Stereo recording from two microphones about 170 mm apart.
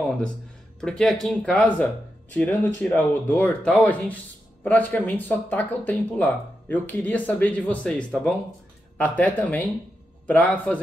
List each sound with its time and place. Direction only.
0.7 s speech: 5° left (ahead or behind)